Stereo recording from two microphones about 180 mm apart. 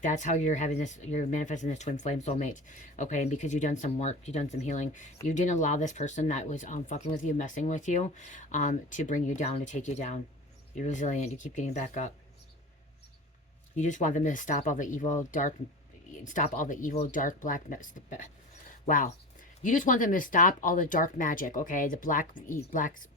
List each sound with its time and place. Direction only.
0.0 s speech: 45° left (ahead or behind)
13.7 s speech: 45° left (ahead or behind)